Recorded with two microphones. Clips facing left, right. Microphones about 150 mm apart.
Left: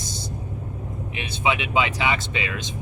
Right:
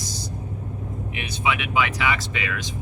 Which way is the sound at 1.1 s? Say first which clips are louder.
Left 1 dB; 25° left (ahead or behind).